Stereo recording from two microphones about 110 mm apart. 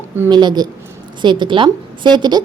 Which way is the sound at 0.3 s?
40° right (ahead or behind).